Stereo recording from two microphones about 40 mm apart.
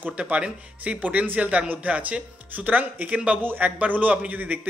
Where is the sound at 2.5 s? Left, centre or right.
Right.